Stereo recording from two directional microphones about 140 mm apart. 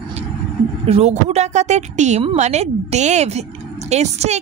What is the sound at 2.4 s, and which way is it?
Music, 55° right (ahead or behind).